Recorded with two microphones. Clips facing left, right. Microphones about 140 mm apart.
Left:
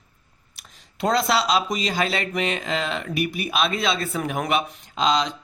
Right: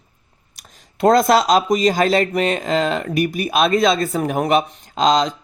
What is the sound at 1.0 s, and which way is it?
Speech, 45° right (ahead or behind).